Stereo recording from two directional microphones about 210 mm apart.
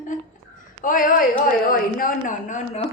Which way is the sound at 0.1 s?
40° left (ahead or behind).